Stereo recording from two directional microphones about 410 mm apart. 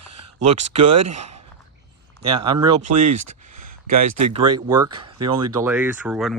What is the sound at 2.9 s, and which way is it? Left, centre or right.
Speech, right.